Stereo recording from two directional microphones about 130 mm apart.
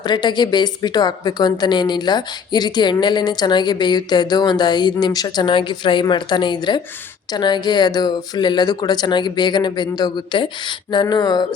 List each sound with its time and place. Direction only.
0.0 s a woman's voice: 35° left (ahead or behind)